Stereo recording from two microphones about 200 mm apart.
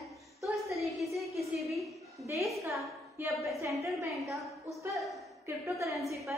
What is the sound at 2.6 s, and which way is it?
A woman's voice, 15° right (ahead or behind).